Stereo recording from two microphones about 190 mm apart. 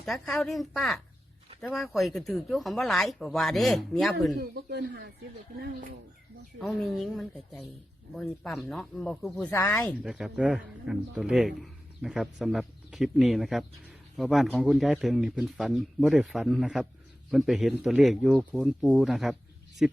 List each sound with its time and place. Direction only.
0.0 s a man's voice: centre (ahead or behind)
4.4 s speech: 60° right (ahead or behind)
6.6 s a man's voice: centre (ahead or behind)
10.0 s a man's voice: centre (ahead or behind)